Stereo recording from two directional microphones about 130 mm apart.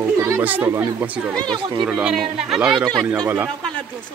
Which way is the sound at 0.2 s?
15° right (ahead or behind).